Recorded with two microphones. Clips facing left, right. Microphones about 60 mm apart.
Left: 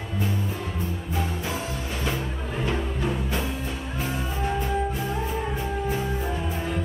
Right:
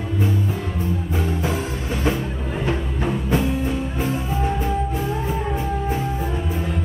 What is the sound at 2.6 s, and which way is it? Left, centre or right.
Music, right.